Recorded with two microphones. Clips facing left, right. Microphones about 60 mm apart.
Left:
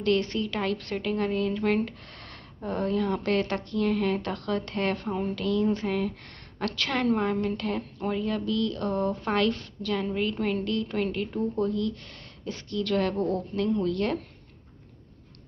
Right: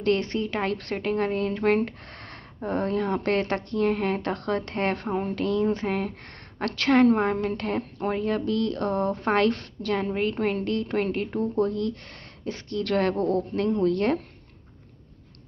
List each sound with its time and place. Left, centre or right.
0.0 s speech: right
4.9 s a woman's voice: right
13.9 s speech: right